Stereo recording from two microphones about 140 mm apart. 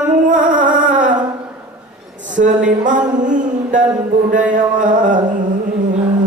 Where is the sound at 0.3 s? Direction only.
70° right (ahead or behind).